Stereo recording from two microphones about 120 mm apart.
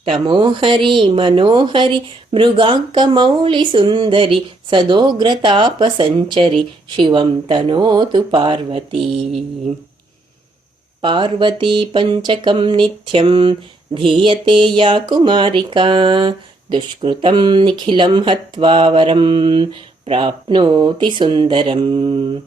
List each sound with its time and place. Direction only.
0.0 s speech: 45° right (ahead or behind)
11.0 s speech: 45° right (ahead or behind)